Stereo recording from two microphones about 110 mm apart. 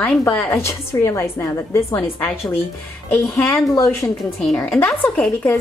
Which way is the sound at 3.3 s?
15° left (ahead or behind).